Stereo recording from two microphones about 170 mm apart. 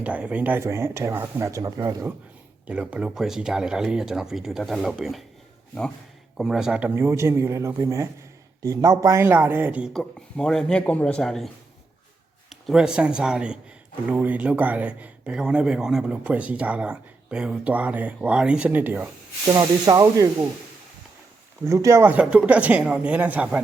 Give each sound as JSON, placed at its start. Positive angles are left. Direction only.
{"t": 0.0, "sound": "speech", "side_deg": -5}
{"t": 2.6, "sound": "speech", "side_deg": -5}
{"t": 6.3, "sound": "speech", "side_deg": 0}
{"t": 19.5, "sound": "speech", "side_deg": -20}
{"t": 21.6, "sound": "speech", "side_deg": -15}